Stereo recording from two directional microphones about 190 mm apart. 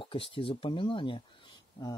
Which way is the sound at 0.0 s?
25° left (ahead or behind).